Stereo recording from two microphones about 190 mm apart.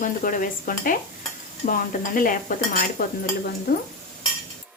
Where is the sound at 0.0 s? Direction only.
45° left (ahead or behind).